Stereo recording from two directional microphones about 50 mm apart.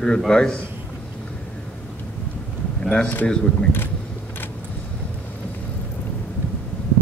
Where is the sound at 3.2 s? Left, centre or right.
Centre.